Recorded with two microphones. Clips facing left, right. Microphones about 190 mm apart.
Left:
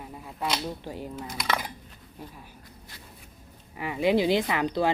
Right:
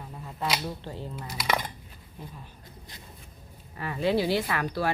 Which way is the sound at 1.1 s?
10° right (ahead or behind).